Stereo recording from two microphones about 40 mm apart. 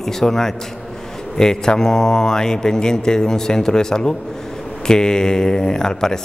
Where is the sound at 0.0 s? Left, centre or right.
Centre.